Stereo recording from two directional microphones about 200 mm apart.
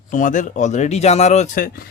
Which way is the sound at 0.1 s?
40° left (ahead or behind).